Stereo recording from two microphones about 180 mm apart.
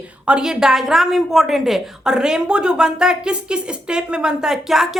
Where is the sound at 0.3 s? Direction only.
5° right (ahead or behind).